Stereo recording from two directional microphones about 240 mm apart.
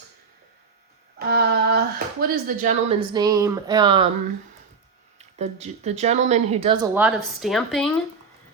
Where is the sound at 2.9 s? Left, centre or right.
Centre.